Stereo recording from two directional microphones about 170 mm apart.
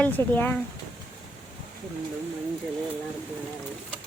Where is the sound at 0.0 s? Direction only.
10° left (ahead or behind).